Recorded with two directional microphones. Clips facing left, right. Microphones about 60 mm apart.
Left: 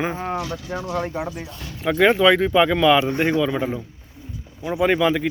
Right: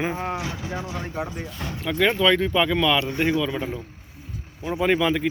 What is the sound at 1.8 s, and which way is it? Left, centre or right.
A man's voice, centre.